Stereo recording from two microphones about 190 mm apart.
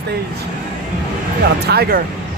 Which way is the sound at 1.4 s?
55° right (ahead or behind).